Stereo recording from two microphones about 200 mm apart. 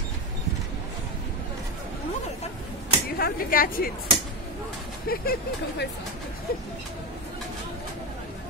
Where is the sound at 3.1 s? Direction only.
45° left (ahead or behind).